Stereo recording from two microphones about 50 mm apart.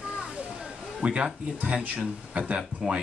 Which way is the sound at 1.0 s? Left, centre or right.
Right.